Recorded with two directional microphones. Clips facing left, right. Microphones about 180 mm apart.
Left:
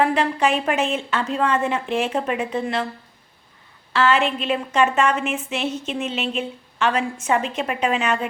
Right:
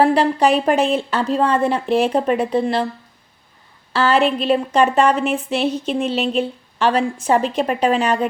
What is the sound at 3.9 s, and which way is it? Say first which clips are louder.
A woman's voice: right 3 dB; 35° right (ahead or behind).